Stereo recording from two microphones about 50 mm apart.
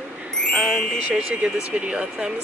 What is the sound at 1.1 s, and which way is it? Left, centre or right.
Speech, centre.